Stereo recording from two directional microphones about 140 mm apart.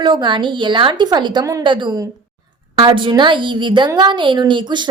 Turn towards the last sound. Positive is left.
turn(degrees=-35)  # may be behind; listen again after turning